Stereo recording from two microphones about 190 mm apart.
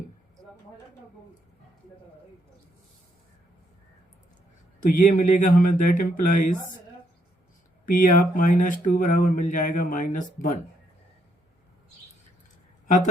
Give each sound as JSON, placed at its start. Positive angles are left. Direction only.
{"t": 4.8, "sound": "speech", "side_deg": 45}
{"t": 7.9, "sound": "speech", "side_deg": 45}